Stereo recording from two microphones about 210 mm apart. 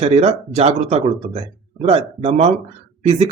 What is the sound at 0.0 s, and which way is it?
Speech, 30° right (ahead or behind).